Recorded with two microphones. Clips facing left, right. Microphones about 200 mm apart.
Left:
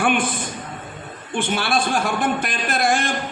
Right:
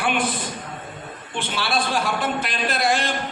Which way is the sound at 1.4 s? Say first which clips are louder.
Left 3 dB; 50° left (ahead or behind).